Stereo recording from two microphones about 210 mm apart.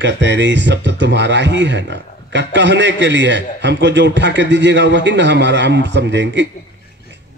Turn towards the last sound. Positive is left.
turn(degrees=-60)  # may be behind; listen again after turning